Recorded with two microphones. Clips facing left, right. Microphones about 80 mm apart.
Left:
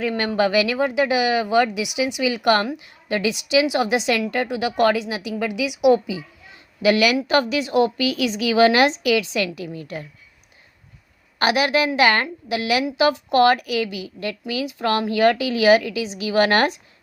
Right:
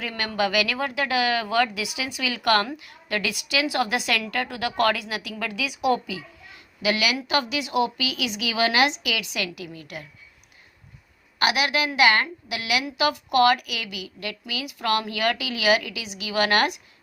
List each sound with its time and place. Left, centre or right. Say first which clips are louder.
0.0 s a woman's voice: left 6 dB; left
6.8 s a woman's voice: left 7 dB; left
11.3 s a woman's voice: left 4 dB; left